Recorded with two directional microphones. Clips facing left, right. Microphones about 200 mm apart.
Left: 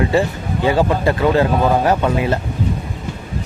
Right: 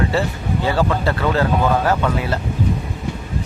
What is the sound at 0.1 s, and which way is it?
Speech, 15° left (ahead or behind).